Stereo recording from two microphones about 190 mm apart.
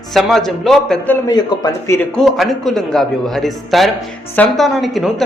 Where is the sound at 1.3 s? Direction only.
20° left (ahead or behind).